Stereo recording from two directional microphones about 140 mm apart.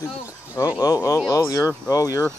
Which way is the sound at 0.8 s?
25° left (ahead or behind).